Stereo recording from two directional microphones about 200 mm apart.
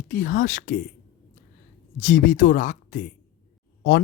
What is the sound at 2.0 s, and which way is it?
Speech, 45° left (ahead or behind).